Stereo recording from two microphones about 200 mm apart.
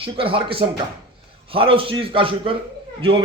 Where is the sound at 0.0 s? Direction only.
25° right (ahead or behind).